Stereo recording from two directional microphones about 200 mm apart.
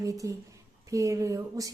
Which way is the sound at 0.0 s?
15° right (ahead or behind).